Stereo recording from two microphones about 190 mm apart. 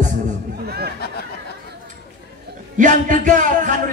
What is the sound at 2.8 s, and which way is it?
Music, 40° right (ahead or behind).